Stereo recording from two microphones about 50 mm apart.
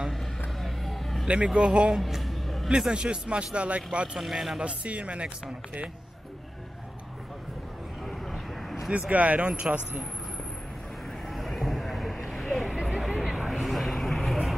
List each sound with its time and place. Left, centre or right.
0.6 s vehicle: centre
1.2 s speech: centre
2.0 s a sound: centre
2.9 s speech: right
4.2 s speech: centre
4.6 s speech: right
8.0 s a sound: centre
9.1 s speech: right
11.1 s vehicle: centre